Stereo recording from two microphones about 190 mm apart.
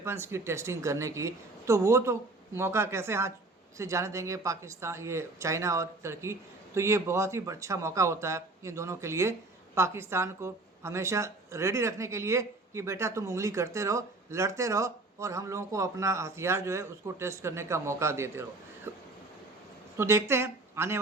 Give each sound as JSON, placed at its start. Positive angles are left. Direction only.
{"t": 0.0, "sound": "speech", "side_deg": -15}